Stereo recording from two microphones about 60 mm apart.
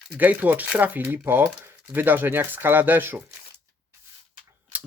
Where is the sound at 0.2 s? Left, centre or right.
Right.